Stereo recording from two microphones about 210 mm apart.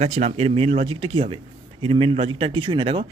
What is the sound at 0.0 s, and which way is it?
Speech, 30° right (ahead or behind).